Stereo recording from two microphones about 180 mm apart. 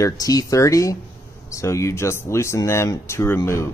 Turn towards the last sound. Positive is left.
turn(degrees=15)  # may be behind; listen again after turning